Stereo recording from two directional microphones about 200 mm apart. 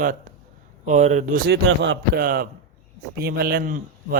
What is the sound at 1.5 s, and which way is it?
Speech, 65° right (ahead or behind).